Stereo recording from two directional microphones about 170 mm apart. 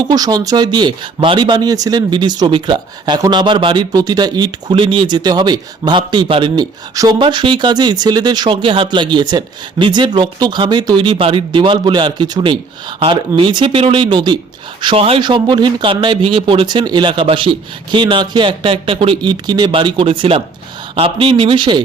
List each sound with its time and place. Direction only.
0.0 s speech: 25° right (ahead or behind)